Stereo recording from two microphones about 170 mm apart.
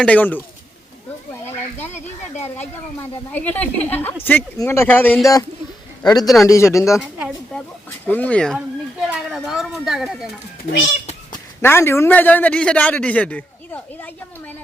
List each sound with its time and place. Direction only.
0.0 s speech: 10° left (ahead or behind)
3.3 s speech: 10° left (ahead or behind)
6.2 s a woman's voice: centre (ahead or behind)
6.5 s speech: 15° left (ahead or behind)
7.2 s a woman's voice: centre (ahead or behind)
8.0 s speech: 10° left (ahead or behind)
8.5 s a woman's voice: 5° right (ahead or behind)
11.6 s speech: 15° left (ahead or behind)